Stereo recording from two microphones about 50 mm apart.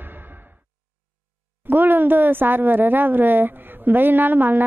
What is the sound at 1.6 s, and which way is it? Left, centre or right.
A woman's voice, right.